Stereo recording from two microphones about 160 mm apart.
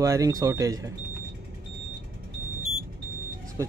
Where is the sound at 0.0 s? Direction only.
20° right (ahead or behind).